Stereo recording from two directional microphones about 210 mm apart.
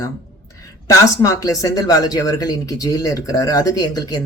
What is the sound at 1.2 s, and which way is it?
Speech, 15° left (ahead or behind).